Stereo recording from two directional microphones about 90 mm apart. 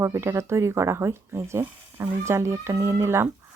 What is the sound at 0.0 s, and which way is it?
Speech, 30° right (ahead or behind).